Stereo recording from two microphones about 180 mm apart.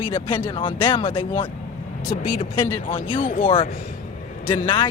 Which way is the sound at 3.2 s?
50° left (ahead or behind).